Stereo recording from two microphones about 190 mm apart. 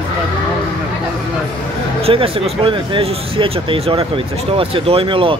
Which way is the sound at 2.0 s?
30° right (ahead or behind).